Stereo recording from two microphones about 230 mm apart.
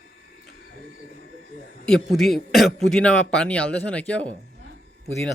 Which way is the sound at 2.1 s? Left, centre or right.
Centre.